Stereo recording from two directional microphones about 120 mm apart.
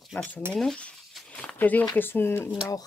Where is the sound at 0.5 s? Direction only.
5° left (ahead or behind).